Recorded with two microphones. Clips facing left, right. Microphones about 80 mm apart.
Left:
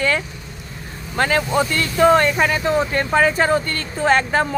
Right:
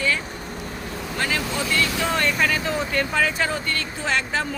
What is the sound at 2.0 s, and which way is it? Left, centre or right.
Speech, left.